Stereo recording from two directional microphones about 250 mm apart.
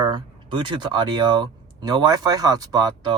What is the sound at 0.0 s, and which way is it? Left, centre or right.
Speech, centre.